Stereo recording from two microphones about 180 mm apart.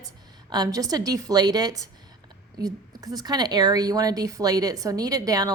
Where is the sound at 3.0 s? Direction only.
20° right (ahead or behind).